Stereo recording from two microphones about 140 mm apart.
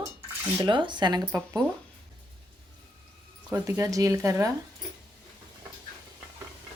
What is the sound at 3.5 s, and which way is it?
Speech, 20° right (ahead or behind).